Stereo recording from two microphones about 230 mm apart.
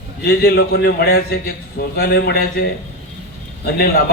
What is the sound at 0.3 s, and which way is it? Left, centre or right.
A man's voice, left.